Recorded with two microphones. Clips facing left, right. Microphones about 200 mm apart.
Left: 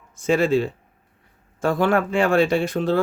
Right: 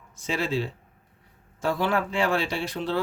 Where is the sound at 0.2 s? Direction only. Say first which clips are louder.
Left 9 dB; 50° left (ahead or behind).